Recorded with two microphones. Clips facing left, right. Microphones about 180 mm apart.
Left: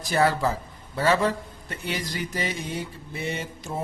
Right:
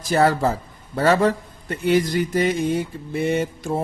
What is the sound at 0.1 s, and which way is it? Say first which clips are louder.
Speech: right 4 dB; 40° right (ahead or behind).